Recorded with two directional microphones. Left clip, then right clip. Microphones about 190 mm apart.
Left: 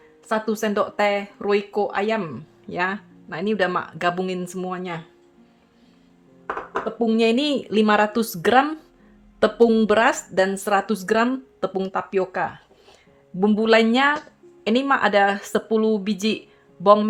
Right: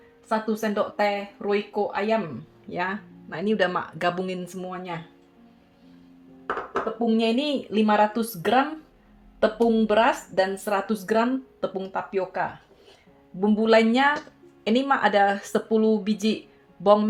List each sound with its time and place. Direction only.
0.3 s speech: 35° left (ahead or behind)
7.0 s speech: 55° left (ahead or behind); by 17.1 s 25° left (ahead or behind)